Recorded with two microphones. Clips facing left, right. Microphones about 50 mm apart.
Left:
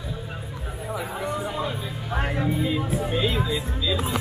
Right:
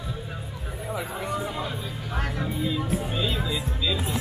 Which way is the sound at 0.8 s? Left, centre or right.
Centre.